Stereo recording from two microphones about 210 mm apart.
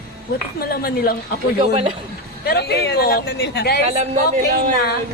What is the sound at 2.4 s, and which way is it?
A woman's voice, 50° left (ahead or behind).